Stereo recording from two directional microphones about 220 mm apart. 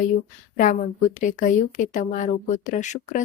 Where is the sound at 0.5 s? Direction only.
35° left (ahead or behind).